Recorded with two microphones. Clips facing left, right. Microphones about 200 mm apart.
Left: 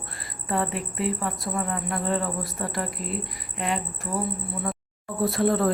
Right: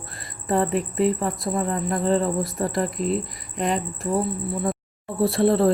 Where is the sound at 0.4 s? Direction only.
40° right (ahead or behind).